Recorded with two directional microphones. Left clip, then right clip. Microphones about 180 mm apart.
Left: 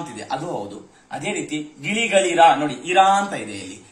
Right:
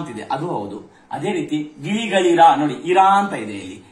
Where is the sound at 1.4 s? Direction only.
Centre (ahead or behind).